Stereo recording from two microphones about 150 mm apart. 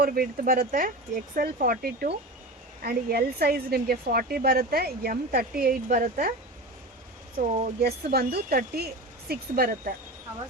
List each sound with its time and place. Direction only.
0.0 s a woman's voice: 75° right (ahead or behind)
5.6 s speech: 65° right (ahead or behind)
7.3 s a woman's voice: 75° right (ahead or behind)